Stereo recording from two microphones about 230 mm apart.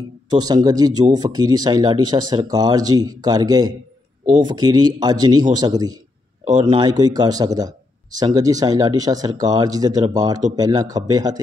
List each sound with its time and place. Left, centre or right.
0.3 s speech: centre